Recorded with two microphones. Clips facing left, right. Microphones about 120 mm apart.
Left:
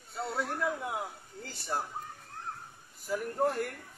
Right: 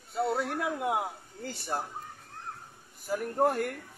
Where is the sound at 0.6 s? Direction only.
65° right (ahead or behind).